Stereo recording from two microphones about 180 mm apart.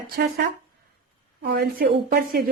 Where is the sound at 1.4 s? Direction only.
60° right (ahead or behind).